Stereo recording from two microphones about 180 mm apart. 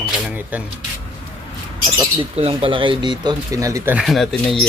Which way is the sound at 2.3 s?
30° right (ahead or behind).